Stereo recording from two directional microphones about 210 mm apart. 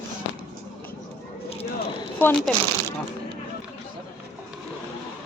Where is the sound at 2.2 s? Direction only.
10° left (ahead or behind).